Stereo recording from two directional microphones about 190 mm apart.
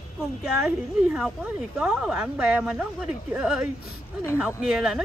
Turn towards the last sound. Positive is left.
turn(degrees=-5)  # may be behind; listen again after turning